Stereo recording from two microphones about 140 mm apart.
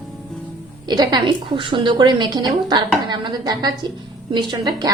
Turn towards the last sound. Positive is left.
turn(degrees=-30)  # may be behind; listen again after turning